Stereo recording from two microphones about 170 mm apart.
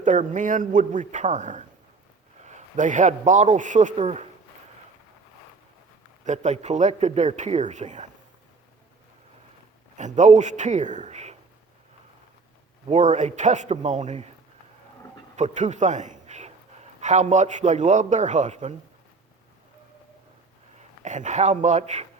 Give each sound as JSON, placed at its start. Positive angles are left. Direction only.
{"t": 0.0, "sound": "a man's voice", "side_deg": -45}
{"t": 6.2, "sound": "speech", "side_deg": -45}
{"t": 10.0, "sound": "speech", "side_deg": -45}
{"t": 12.9, "sound": "speech", "side_deg": -45}
{"t": 15.4, "sound": "a man's voice", "side_deg": -45}
{"t": 20.7, "sound": "speech", "side_deg": -45}